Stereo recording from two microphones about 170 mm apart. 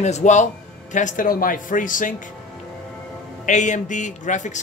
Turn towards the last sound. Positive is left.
turn(degrees=45)  # may be behind; listen again after turning